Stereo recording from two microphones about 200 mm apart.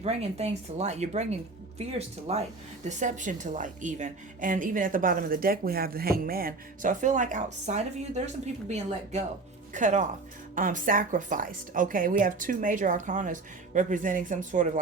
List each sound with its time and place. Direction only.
0.0 s a woman's voice: 30° right (ahead or behind)
9.7 s a woman's voice: 40° right (ahead or behind)